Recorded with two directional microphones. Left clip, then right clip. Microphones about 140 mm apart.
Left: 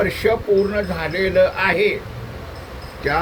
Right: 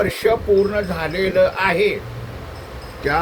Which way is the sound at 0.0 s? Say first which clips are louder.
Right 1 dB; 20° right (ahead or behind).